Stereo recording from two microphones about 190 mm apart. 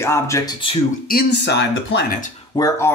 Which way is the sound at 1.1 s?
55° left (ahead or behind).